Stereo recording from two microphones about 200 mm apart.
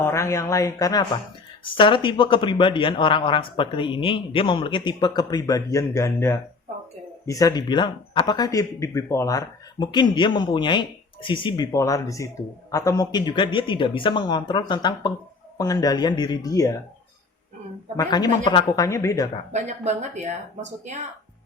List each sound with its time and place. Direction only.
0.0 s speech: 15° left (ahead or behind)
17.9 s speech: 20° left (ahead or behind)
19.5 s speech: 35° right (ahead or behind)